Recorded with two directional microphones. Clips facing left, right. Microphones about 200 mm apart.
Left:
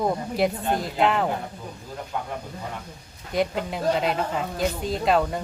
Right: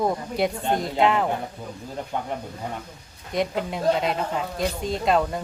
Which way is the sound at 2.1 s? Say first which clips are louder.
Right 1 dB; 25° right (ahead or behind).